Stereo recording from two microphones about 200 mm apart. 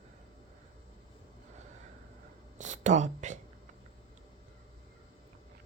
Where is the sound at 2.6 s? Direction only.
35° right (ahead or behind).